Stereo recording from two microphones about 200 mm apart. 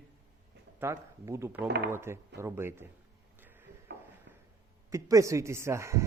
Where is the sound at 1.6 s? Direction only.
55° right (ahead or behind).